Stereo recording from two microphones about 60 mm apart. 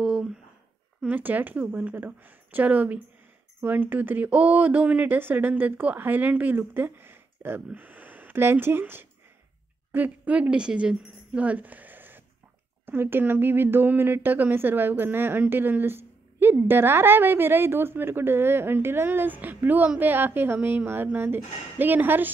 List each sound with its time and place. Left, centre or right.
0.0 s a sound: centre
1.0 s a woman's voice: right
9.9 s a woman's voice: right